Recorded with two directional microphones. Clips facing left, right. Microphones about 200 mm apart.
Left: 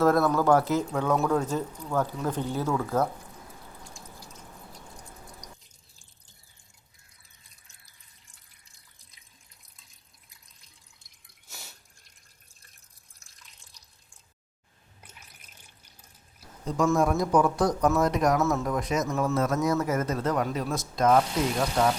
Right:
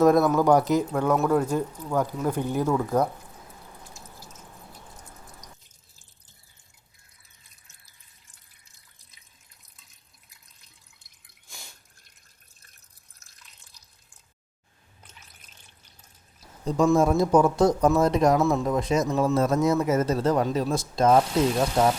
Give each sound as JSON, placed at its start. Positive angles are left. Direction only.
{"t": 0.0, "sound": "speech", "side_deg": -15}
{"t": 3.9, "sound": "drip", "side_deg": -5}
{"t": 10.6, "sound": "drip", "side_deg": 5}
{"t": 13.1, "sound": "drip", "side_deg": 0}
{"t": 16.6, "sound": "a man's voice", "side_deg": -30}
{"t": 19.3, "sound": "speech", "side_deg": -30}